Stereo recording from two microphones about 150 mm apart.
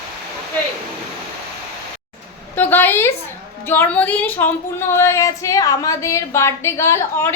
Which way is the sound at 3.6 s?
10° left (ahead or behind).